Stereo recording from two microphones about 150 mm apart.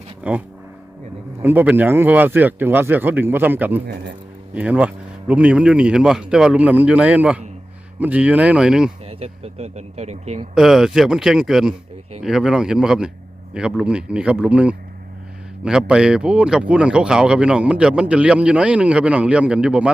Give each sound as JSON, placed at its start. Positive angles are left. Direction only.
{"t": 0.2, "sound": "speech", "side_deg": -10}
{"t": 9.0, "sound": "speech", "side_deg": -45}
{"t": 10.5, "sound": "speech", "side_deg": 0}